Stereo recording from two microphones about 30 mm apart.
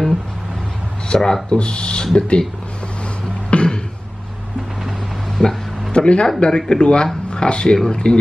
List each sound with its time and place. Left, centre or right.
1.0 s a sound: left
1.5 s speech: left
3.4 s a sound: left
5.4 s speech: centre
5.9 s speech: left
7.7 s speech: left